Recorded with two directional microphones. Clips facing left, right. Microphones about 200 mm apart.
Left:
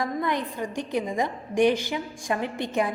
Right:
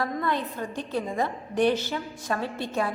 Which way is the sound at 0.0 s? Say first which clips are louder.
Left 1 dB; 15° left (ahead or behind).